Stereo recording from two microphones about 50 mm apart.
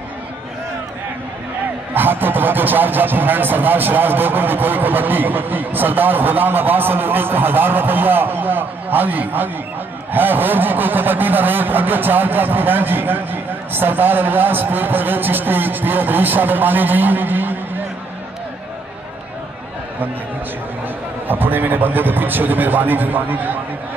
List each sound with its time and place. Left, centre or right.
2.0 s speech: right
21.3 s speech: right